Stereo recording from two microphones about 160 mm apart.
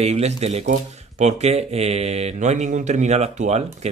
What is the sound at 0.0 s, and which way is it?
Speech, 40° right (ahead or behind).